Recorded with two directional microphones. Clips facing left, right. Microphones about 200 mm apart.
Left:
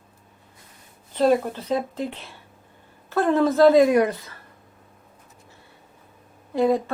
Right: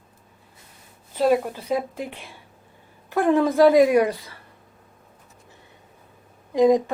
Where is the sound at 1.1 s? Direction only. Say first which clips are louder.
Left 1 dB; 5° right (ahead or behind).